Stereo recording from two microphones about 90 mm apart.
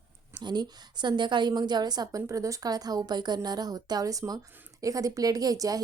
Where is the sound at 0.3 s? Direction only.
55° right (ahead or behind).